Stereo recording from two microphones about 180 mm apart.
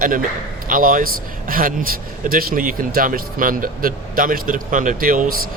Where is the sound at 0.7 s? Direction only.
50° right (ahead or behind).